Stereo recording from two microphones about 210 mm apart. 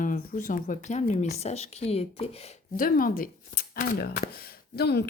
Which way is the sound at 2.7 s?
40° left (ahead or behind).